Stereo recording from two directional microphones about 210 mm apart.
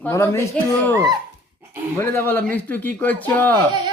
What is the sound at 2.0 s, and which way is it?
Speech, 10° left (ahead or behind).